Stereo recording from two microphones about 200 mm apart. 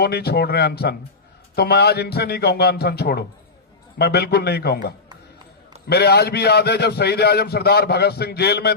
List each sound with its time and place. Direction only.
0.0 s a man's voice: 55° left (ahead or behind)
5.9 s a man's voice: 55° left (ahead or behind)